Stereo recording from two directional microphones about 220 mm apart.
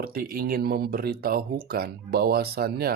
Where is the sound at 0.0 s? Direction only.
45° right (ahead or behind).